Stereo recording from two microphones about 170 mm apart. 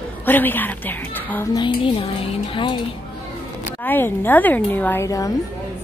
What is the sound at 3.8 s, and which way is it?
A woman's voice, 10° left (ahead or behind).